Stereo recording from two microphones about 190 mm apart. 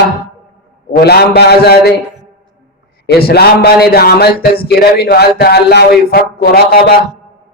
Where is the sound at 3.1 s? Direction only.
55° left (ahead or behind).